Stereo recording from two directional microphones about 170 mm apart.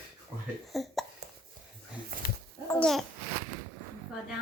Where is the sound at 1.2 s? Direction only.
70° right (ahead or behind).